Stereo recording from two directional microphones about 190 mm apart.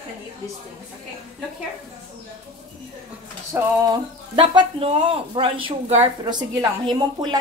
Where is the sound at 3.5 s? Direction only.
10° right (ahead or behind).